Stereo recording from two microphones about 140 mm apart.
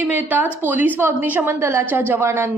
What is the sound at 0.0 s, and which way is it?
A woman's voice, 10° right (ahead or behind).